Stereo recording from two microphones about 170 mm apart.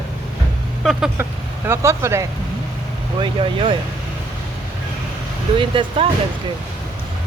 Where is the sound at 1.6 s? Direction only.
15° right (ahead or behind).